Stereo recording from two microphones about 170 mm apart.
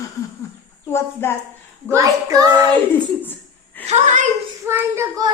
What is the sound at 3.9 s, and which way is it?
Speech, 45° right (ahead or behind).